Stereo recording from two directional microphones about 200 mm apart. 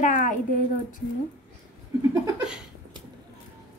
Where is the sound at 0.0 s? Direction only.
40° left (ahead or behind).